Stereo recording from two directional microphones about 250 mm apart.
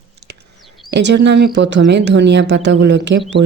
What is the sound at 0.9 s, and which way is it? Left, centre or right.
Speech, right.